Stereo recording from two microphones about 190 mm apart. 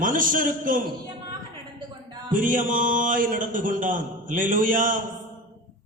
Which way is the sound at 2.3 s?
45° right (ahead or behind).